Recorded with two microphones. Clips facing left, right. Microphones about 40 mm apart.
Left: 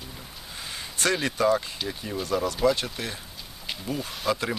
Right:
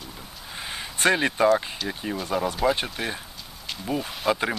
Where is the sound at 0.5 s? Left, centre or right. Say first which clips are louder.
Right 3 dB; right.